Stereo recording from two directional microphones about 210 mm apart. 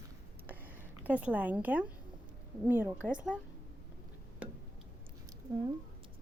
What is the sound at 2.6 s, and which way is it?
Speech, 10° right (ahead or behind).